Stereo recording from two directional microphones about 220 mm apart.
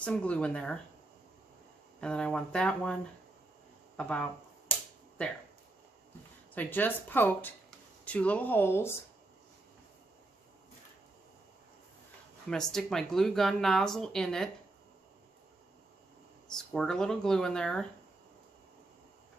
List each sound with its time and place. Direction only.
0.0 s speech: 5° left (ahead or behind)
2.0 s speech: 5° left (ahead or behind)
6.5 s a woman's voice: 10° left (ahead or behind)
12.4 s speech: centre (ahead or behind)
16.4 s speech: 5° left (ahead or behind)